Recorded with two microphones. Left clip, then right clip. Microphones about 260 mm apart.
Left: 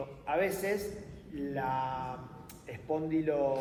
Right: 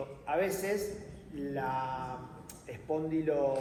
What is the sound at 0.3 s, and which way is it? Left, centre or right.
A man's voice, left.